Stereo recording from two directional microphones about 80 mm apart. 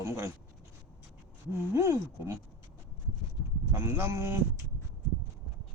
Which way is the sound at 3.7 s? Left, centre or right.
Right.